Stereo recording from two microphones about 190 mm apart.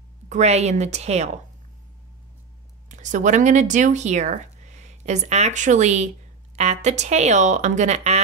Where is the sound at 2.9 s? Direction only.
40° right (ahead or behind).